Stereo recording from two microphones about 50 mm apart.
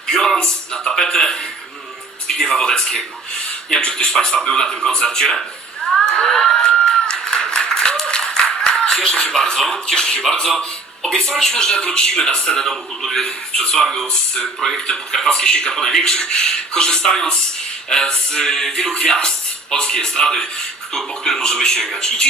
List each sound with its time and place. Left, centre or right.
0.1 s music: centre
0.3 s speech: centre
5.4 s a sound: centre
9.3 s speech: centre